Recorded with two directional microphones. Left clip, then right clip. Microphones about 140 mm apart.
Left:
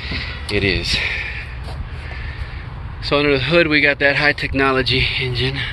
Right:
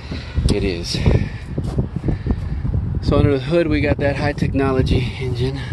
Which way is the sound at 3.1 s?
25° right (ahead or behind).